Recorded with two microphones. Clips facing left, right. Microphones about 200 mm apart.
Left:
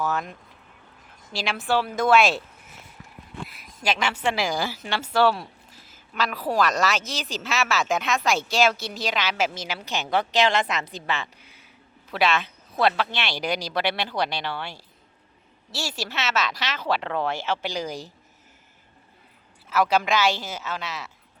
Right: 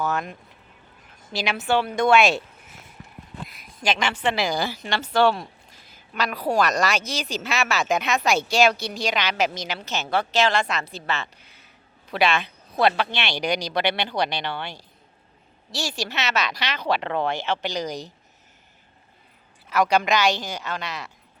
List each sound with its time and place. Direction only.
0.0 s a woman's voice: centre (ahead or behind)
3.5 s a woman's voice: 5° left (ahead or behind)
19.7 s a woman's voice: 5° left (ahead or behind)